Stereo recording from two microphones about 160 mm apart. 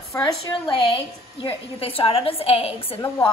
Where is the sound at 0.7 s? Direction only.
30° left (ahead or behind).